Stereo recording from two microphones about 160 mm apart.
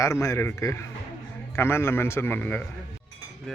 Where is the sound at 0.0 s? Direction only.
20° left (ahead or behind).